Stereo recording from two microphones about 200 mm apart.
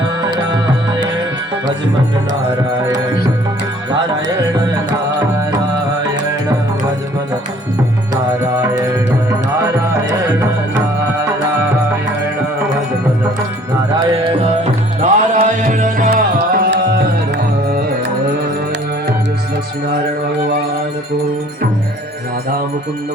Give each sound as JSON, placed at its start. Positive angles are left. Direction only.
{"t": 14.6, "sound": "music", "side_deg": -40}